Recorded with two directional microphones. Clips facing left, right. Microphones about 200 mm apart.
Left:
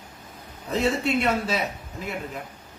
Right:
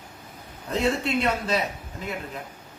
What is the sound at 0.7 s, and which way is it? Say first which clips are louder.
Speech: left 1 dB; 5° left (ahead or behind).